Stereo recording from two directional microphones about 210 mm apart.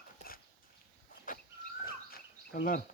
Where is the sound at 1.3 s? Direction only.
40° left (ahead or behind).